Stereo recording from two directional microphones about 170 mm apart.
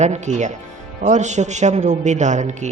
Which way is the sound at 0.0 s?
45° right (ahead or behind).